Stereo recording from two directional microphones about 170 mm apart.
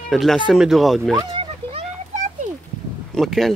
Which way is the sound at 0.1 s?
Centre (ahead or behind).